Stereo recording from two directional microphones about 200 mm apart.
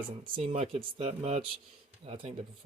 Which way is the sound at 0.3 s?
30° right (ahead or behind).